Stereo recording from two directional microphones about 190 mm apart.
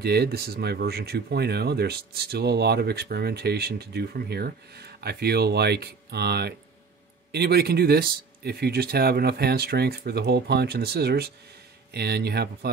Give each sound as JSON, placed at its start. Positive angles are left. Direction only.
{"t": 0.0, "sound": "speech", "side_deg": -60}